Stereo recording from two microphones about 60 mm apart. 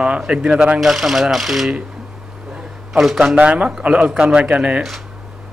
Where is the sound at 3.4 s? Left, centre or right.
Centre.